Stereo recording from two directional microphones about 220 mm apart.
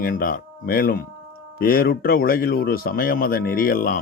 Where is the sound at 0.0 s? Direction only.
40° left (ahead or behind).